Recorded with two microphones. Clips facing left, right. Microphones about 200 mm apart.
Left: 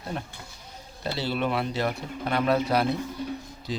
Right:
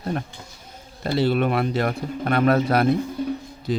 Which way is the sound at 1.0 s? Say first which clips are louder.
Right 7 dB; 55° right (ahead or behind).